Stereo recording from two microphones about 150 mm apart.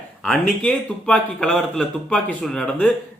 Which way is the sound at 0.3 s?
5° left (ahead or behind).